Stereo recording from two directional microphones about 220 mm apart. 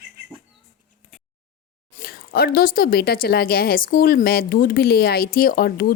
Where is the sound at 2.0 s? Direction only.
45° left (ahead or behind).